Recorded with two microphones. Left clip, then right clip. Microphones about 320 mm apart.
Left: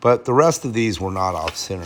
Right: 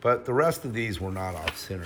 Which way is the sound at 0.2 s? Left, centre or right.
Centre.